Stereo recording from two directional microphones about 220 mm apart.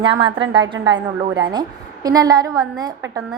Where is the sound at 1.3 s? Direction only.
20° right (ahead or behind).